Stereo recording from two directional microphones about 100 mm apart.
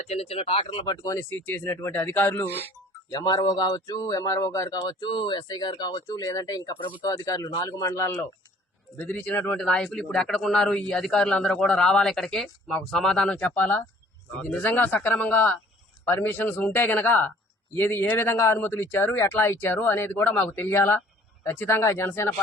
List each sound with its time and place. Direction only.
0.1 s speech: 90° left; by 0.9 s 75° left (ahead or behind)
1.0 s a man's voice: 35° left (ahead or behind)
1.3 s speech: 15° left (ahead or behind)
3.1 s a man's voice: 40° left (ahead or behind)
4.8 s a man's voice: 45° left (ahead or behind); by 13.3 s 5° left (ahead or behind)
13.3 s speech: 15° left (ahead or behind)